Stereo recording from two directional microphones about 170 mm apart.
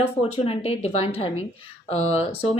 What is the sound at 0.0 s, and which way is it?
Speech, 35° left (ahead or behind).